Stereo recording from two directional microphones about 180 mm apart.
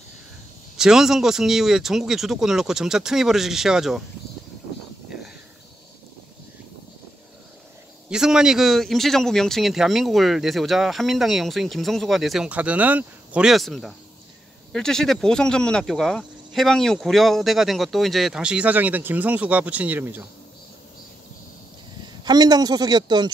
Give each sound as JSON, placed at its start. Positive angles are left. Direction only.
{"t": 0.7, "sound": "a man's voice", "side_deg": -5}
{"t": 8.1, "sound": "a man's voice", "side_deg": -5}
{"t": 22.2, "sound": "speech", "side_deg": -20}